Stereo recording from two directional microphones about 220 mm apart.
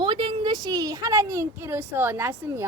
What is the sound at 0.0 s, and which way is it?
Speech, 25° right (ahead or behind).